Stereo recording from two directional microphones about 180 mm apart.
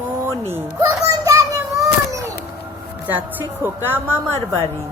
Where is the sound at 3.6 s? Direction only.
10° right (ahead or behind).